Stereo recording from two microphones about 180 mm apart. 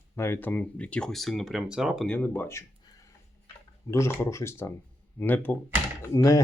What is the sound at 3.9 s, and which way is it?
Speech, 15° left (ahead or behind).